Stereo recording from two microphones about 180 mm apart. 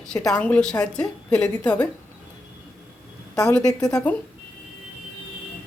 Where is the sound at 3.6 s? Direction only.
20° left (ahead or behind).